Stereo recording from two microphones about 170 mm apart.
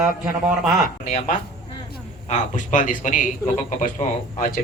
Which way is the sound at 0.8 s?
50° left (ahead or behind).